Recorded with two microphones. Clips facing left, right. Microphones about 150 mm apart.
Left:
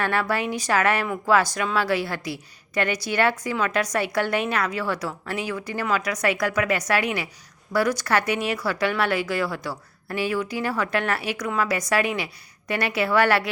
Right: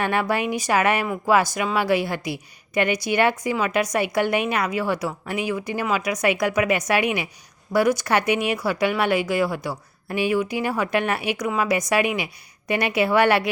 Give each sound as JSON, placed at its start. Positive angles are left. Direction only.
{"t": 0.0, "sound": "speech", "side_deg": -15}